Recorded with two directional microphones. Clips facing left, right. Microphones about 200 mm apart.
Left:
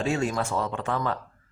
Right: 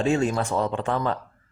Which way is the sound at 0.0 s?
35° right (ahead or behind).